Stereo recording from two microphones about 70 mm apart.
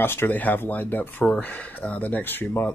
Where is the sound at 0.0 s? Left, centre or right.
Left.